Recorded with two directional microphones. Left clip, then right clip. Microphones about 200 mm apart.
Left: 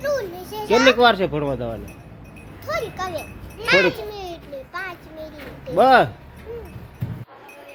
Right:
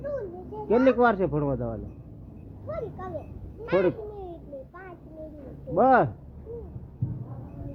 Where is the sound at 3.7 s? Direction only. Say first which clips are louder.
Left 8 dB; 10° left (ahead or behind).